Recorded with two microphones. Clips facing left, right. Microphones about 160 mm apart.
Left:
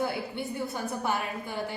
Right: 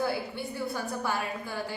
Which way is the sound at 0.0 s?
20° left (ahead or behind).